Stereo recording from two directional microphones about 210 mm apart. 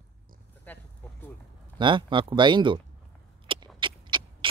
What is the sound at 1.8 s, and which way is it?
Speech, 25° right (ahead or behind).